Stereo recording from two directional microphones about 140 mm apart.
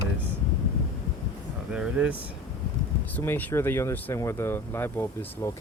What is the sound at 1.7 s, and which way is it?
Speech, 5° right (ahead or behind).